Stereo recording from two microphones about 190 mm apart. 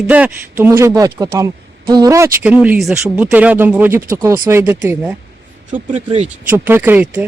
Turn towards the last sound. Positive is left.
turn(degrees=-10)  # may be behind; listen again after turning